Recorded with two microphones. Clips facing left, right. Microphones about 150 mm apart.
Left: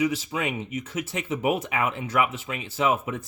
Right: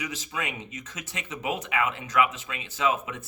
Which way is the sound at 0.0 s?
30° left (ahead or behind).